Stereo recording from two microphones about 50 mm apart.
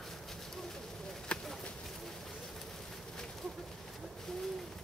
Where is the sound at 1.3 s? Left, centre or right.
Centre.